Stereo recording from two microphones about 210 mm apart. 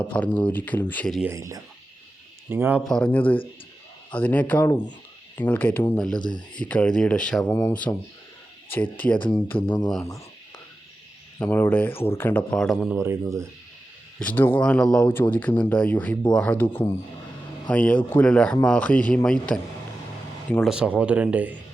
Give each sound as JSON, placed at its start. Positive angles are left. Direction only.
{"t": 0.0, "sound": "speech", "side_deg": 5}
{"t": 1.3, "sound": "speech", "side_deg": -15}
{"t": 2.8, "sound": "speech", "side_deg": 5}
{"t": 6.1, "sound": "speech", "side_deg": 20}
{"t": 6.6, "sound": "speech", "side_deg": 5}
{"t": 9.1, "sound": "speech", "side_deg": 20}
{"t": 11.3, "sound": "speech", "side_deg": 10}
{"t": 13.0, "sound": "speech", "side_deg": -15}
{"t": 14.2, "sound": "speech", "side_deg": 10}